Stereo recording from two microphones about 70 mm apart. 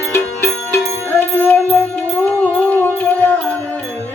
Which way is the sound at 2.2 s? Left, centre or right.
Left.